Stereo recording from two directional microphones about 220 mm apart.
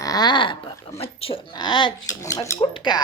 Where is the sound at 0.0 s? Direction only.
15° left (ahead or behind).